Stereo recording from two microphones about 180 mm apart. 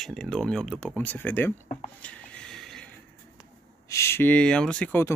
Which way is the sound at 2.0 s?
5° left (ahead or behind).